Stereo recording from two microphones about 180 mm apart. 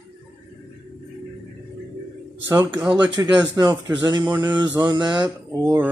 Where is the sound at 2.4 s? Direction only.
15° right (ahead or behind).